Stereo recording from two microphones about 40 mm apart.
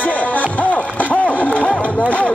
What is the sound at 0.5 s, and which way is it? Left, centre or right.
Music, left.